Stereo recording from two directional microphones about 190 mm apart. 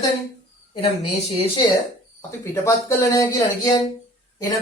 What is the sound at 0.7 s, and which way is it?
Speech, 25° left (ahead or behind).